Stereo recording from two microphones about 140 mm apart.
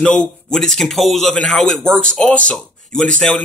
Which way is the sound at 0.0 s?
5° left (ahead or behind).